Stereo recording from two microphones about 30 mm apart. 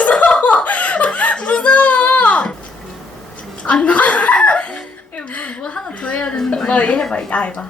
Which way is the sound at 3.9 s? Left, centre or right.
Left.